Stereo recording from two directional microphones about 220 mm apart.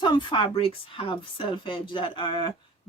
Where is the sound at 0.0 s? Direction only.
20° left (ahead or behind).